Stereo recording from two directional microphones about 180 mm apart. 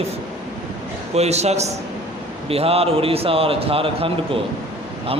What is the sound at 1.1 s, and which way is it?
A man's voice, 35° right (ahead or behind).